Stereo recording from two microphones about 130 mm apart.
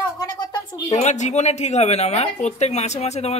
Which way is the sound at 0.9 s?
65° left (ahead or behind).